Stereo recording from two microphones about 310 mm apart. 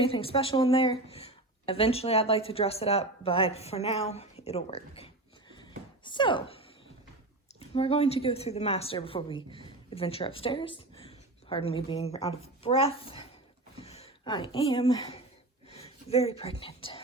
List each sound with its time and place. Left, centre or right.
0.0 s speech: centre
7.7 s a woman's voice: centre